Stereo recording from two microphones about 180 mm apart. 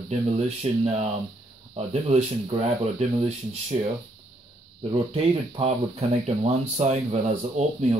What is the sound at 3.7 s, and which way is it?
Speech, 35° right (ahead or behind).